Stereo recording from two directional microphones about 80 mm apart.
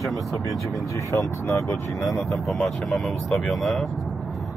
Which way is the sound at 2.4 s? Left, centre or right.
Centre.